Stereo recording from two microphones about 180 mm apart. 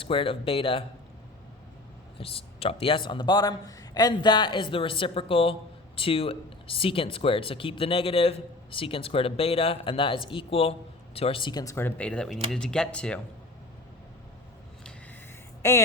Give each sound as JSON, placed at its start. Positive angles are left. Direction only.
{"t": 0.0, "sound": "speech", "side_deg": 30}
{"t": 2.1, "sound": "speech", "side_deg": 30}